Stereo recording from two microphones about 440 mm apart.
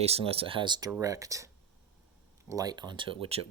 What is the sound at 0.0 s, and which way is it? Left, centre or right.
Speech, centre.